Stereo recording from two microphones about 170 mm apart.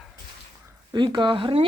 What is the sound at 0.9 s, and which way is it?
Speech, 25° right (ahead or behind).